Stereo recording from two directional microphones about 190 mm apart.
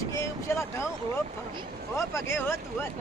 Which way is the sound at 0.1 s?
15° left (ahead or behind).